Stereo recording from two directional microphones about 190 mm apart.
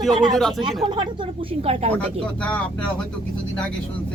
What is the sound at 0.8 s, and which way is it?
Speech, 25° right (ahead or behind).